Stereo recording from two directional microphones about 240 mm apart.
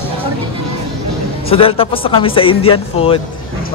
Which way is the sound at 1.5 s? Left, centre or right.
Left.